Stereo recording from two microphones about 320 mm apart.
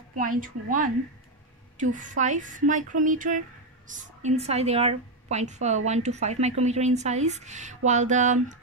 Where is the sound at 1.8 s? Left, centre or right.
Right.